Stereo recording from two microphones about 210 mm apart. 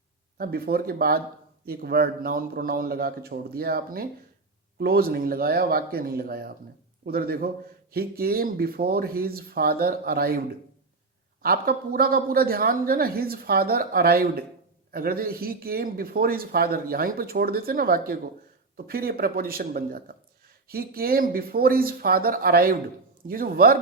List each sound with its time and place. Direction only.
0.3 s speech: 45° right (ahead or behind)
11.4 s speech: 45° right (ahead or behind)